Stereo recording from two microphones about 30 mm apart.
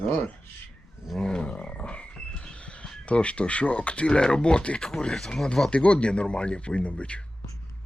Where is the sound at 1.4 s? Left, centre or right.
Left.